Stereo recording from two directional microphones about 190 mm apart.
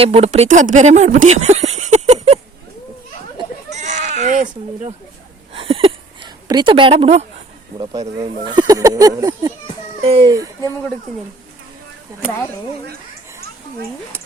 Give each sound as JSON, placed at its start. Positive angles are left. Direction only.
{"t": 0.0, "sound": "speech", "side_deg": -30}
{"t": 3.7, "sound": "goat", "side_deg": -35}
{"t": 5.5, "sound": "a sound", "side_deg": -30}
{"t": 7.8, "sound": "speech", "side_deg": -25}
{"t": 10.0, "sound": "speech", "side_deg": -30}
{"t": 10.3, "sound": "speech", "side_deg": -15}